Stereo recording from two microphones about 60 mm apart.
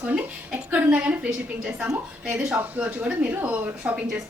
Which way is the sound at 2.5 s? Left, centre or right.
Right.